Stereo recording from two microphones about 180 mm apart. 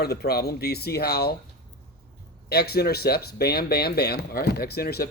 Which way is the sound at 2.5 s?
60° left (ahead or behind).